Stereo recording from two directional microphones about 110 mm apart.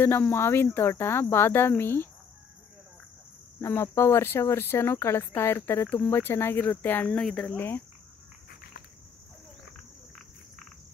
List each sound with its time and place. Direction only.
0.0 s speech: 20° left (ahead or behind)
3.6 s speech: 25° left (ahead or behind)